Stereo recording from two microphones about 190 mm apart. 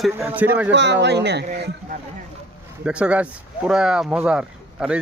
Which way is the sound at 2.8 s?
5° right (ahead or behind).